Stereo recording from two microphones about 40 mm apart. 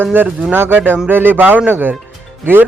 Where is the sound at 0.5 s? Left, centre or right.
Right.